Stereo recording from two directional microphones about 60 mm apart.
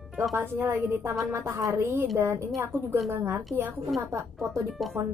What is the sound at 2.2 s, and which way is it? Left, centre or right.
Speech, right.